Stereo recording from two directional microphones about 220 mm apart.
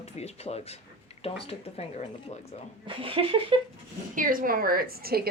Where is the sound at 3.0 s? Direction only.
25° right (ahead or behind).